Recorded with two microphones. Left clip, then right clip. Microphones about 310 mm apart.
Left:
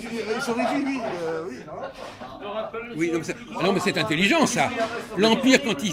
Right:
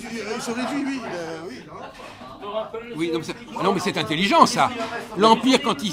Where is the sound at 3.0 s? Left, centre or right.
Centre.